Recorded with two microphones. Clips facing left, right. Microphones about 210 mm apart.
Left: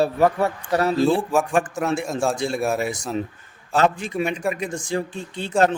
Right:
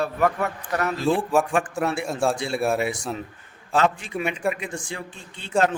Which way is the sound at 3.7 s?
40° left (ahead or behind).